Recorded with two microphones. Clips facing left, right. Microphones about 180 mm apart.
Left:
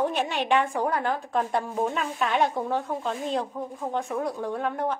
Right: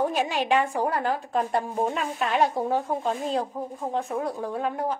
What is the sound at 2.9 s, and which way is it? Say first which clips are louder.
Speech: right 3 dB; 40° right (ahead or behind).